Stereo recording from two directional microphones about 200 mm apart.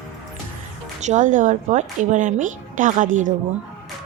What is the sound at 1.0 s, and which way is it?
Speech, 35° right (ahead or behind).